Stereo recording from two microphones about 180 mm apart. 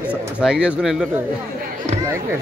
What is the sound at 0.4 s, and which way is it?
Speech, 5° right (ahead or behind).